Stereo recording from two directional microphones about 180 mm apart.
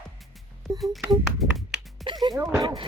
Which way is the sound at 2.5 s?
25° right (ahead or behind).